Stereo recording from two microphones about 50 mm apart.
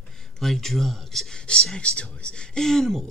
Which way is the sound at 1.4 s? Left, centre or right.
Centre.